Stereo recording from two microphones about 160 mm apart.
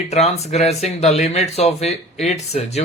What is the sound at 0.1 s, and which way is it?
Speech, 40° left (ahead or behind).